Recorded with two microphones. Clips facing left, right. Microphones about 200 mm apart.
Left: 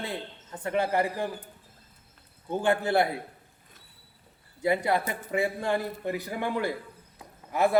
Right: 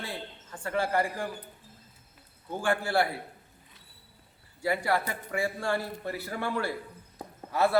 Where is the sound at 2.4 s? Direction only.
20° left (ahead or behind).